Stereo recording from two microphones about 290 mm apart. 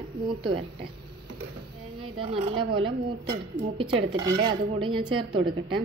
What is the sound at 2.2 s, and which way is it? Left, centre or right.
A woman's voice, centre.